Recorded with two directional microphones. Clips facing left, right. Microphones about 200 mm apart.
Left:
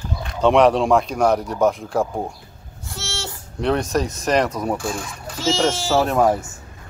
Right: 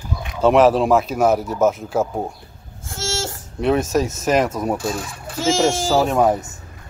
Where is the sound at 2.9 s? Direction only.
50° right (ahead or behind).